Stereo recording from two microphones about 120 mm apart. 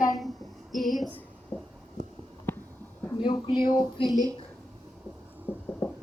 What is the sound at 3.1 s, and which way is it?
Speech, 40° left (ahead or behind).